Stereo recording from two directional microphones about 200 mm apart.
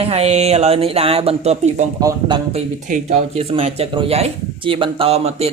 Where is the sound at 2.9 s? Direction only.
35° right (ahead or behind).